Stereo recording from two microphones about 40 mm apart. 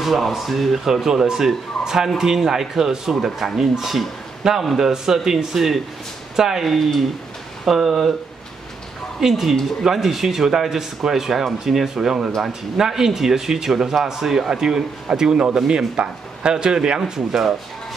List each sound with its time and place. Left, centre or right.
0.0 s a man's voice: centre
6.6 s speech: centre
9.2 s speech: centre